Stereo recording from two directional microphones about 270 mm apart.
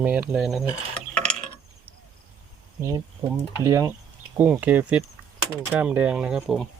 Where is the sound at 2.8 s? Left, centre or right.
Centre.